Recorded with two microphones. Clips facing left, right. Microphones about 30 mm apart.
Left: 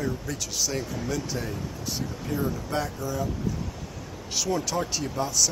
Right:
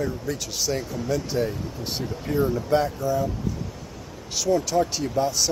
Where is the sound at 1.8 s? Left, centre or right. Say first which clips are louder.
Right 2 dB; right.